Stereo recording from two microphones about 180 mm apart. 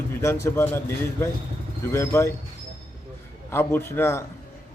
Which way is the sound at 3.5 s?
10° left (ahead or behind).